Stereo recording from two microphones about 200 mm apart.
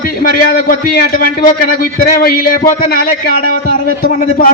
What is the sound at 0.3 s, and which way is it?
Speech, 45° left (ahead or behind).